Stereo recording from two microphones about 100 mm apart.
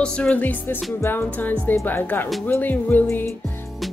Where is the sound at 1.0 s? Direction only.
20° left (ahead or behind).